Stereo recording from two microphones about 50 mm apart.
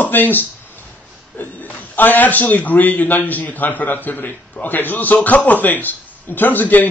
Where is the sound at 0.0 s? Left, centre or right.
Left.